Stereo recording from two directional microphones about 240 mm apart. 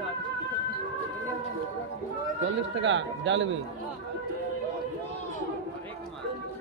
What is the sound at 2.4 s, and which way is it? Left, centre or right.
Speech, right.